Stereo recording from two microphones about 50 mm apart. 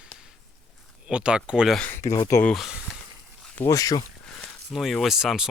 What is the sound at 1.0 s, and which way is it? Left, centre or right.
Speech, right.